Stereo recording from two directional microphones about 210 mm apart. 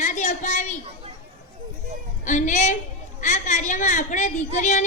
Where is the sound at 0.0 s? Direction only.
35° left (ahead or behind).